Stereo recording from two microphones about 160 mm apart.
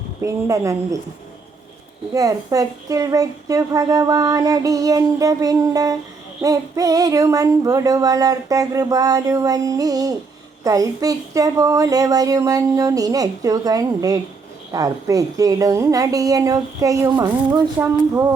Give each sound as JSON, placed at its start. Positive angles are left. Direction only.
{"t": 0.2, "sound": "a woman's voice", "side_deg": -20}
{"t": 2.1, "sound": "a woman's voice", "side_deg": -20}